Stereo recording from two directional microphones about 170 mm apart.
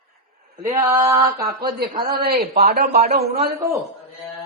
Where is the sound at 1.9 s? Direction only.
60° right (ahead or behind).